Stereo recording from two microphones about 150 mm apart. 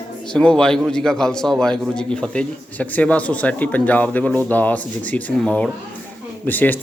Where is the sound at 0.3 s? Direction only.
5° left (ahead or behind).